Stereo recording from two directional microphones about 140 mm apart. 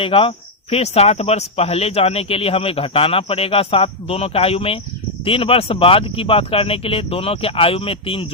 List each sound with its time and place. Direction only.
0.0 s speech: 40° left (ahead or behind)